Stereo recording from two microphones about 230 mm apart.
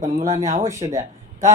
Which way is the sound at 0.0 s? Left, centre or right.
Right.